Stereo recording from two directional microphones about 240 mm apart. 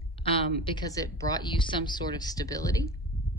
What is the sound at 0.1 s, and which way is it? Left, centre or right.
A woman's voice, left.